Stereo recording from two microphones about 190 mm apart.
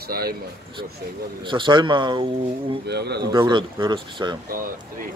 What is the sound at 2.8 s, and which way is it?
Speech, 60° right (ahead or behind).